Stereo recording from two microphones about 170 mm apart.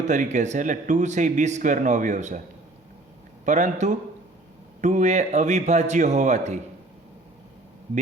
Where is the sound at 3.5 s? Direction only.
45° right (ahead or behind).